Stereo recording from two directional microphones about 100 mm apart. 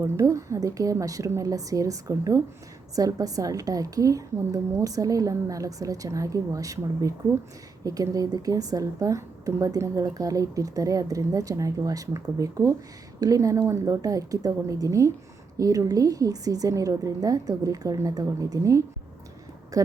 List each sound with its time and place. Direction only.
0.0 s a woman's voice: 30° right (ahead or behind)